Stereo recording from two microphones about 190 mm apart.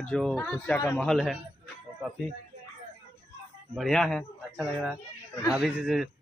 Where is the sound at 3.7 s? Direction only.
Centre (ahead or behind).